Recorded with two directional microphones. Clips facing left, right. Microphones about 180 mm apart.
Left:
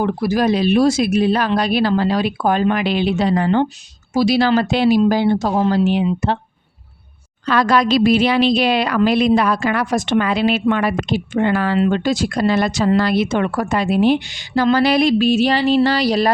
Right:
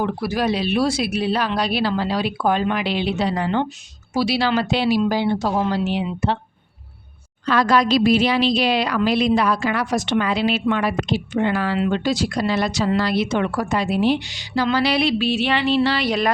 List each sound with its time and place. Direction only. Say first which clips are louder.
0.0 s speech: left 4 dB; 45° left (ahead or behind)
7.4 s speech: left 2 dB; 65° left (ahead or behind); by 16.3 s 35° left (ahead or behind)